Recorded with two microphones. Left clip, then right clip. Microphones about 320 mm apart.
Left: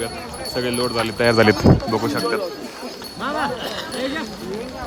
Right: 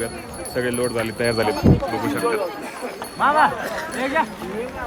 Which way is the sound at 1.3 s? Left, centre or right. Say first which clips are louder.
Left 7 dB; left.